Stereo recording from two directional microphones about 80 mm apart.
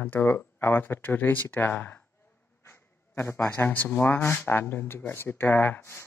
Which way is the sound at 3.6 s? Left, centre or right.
Centre.